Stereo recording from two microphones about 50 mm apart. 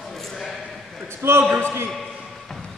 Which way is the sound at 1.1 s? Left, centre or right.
Right.